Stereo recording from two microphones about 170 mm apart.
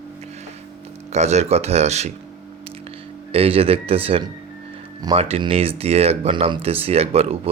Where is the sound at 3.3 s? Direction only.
35° right (ahead or behind).